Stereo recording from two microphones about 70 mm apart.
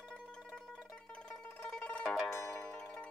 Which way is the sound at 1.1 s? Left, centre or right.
Centre.